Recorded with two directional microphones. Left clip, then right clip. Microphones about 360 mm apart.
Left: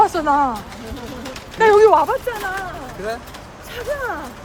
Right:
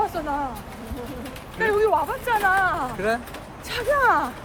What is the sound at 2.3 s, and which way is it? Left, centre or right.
Speech, centre.